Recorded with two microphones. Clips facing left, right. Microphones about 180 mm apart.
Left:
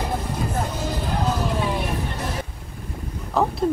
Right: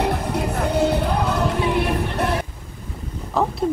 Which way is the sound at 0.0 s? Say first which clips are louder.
Right 4 dB; 70° right (ahead or behind).